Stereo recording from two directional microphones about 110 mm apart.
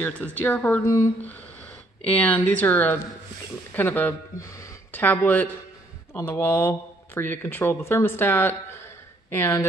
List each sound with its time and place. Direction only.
0.0 s speech: 15° left (ahead or behind)
0.8 s speech: 30° left (ahead or behind)
2.1 s speech: 15° left (ahead or behind)